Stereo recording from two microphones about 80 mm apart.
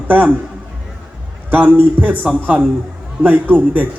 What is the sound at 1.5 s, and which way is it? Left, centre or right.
Speech, right.